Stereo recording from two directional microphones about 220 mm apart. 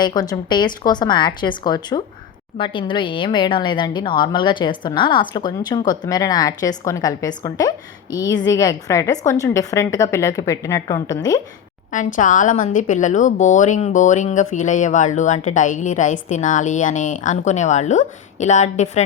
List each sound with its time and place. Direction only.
0.0 s a woman's voice: 20° left (ahead or behind)
11.9 s a woman's voice: 35° left (ahead or behind)